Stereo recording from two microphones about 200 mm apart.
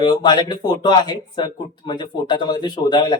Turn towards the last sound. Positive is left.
turn(degrees=20)  # may be behind; listen again after turning